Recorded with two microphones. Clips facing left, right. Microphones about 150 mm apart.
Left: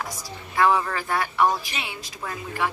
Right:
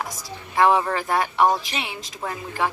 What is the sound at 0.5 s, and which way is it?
A woman's voice, 25° right (ahead or behind).